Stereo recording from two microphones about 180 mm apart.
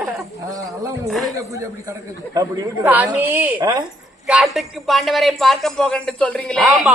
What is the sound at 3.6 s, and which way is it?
Speech, 20° right (ahead or behind).